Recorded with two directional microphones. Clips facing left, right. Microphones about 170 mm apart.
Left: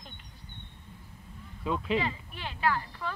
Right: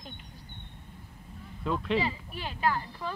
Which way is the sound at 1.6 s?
Centre (ahead or behind).